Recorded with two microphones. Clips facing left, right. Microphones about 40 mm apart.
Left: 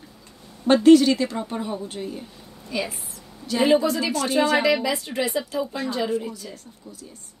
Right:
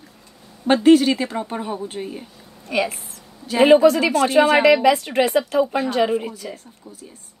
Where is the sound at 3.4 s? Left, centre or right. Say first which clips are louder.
Right 7 dB; right.